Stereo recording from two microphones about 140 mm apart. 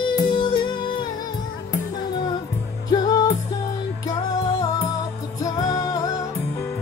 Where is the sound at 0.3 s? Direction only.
35° left (ahead or behind).